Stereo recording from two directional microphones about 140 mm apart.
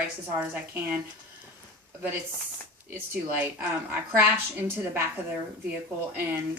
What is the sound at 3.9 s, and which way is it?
A woman's voice, 15° right (ahead or behind).